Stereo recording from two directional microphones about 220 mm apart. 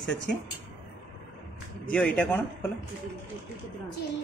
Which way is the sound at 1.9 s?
5° left (ahead or behind).